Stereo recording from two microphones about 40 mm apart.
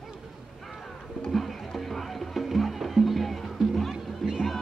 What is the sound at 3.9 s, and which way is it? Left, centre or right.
Music, centre.